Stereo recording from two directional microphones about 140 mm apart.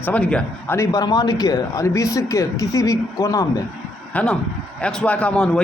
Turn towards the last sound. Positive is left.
turn(degrees=5)  # may be behind; listen again after turning